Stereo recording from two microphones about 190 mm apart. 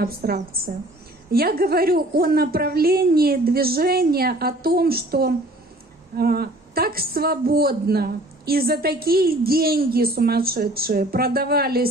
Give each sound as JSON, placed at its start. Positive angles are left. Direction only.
{"t": 0.0, "sound": "a woman's voice", "side_deg": -55}